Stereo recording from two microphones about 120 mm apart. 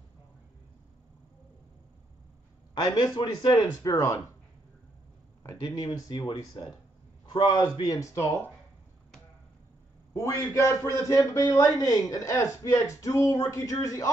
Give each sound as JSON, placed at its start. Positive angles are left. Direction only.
{"t": 2.7, "sound": "a man's voice", "side_deg": 35}
{"t": 5.7, "sound": "speech", "side_deg": 30}
{"t": 10.1, "sound": "a man's voice", "side_deg": 25}